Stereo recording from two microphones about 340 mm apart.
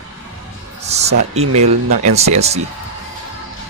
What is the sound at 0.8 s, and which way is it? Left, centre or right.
Speech, centre.